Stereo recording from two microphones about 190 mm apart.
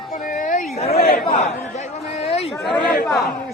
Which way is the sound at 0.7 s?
35° left (ahead or behind).